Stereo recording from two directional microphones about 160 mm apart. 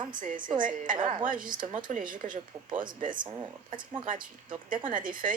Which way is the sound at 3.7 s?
30° right (ahead or behind).